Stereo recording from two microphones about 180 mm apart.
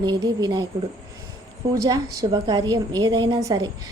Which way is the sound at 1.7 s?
20° right (ahead or behind).